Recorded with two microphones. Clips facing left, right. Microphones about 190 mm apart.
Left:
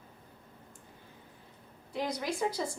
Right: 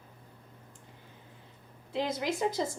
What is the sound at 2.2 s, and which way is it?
Speech, 20° right (ahead or behind).